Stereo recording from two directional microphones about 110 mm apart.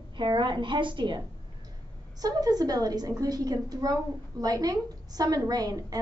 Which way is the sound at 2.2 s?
35° right (ahead or behind).